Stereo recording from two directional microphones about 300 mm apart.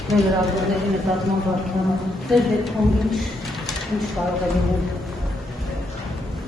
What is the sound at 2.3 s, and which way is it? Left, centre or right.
Speech, centre.